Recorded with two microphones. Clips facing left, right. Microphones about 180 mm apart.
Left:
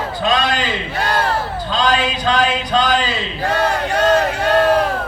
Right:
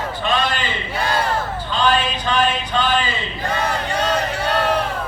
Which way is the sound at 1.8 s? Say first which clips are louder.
Left 1 dB; 90° left.